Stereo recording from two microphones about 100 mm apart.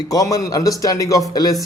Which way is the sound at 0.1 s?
35° left (ahead or behind).